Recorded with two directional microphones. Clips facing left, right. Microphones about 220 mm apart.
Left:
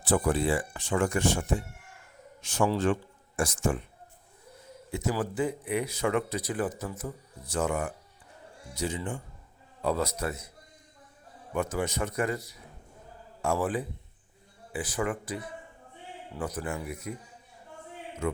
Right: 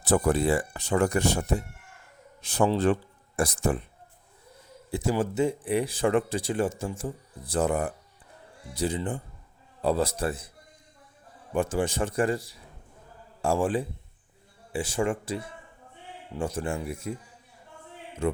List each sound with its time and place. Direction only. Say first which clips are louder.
0.0 s speech: right 3 dB; 40° right (ahead or behind)
4.9 s speech: right 4 dB; 30° right (ahead or behind)
11.5 s speech: right 4 dB; 30° right (ahead or behind)
18.2 s speech: right 4 dB; 30° right (ahead or behind)